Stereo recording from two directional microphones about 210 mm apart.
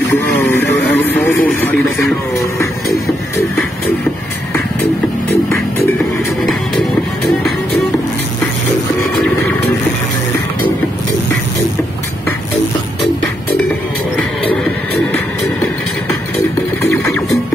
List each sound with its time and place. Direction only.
0.4 s vehicle: 10° left (ahead or behind)
14.1 s music: 5° left (ahead or behind)